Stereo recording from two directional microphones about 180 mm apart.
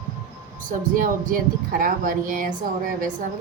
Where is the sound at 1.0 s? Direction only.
50° right (ahead or behind).